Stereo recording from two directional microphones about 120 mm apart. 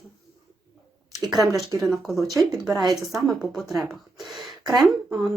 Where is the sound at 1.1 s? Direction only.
Centre (ahead or behind).